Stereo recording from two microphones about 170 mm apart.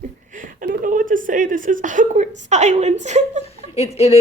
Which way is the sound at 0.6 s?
55° right (ahead or behind).